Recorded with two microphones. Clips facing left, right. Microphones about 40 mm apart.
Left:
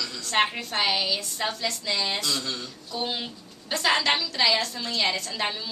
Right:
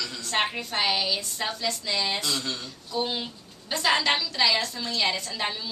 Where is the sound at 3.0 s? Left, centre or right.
Centre.